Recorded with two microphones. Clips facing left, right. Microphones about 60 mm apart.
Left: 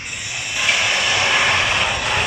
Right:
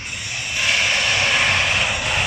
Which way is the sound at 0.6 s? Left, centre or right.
Centre.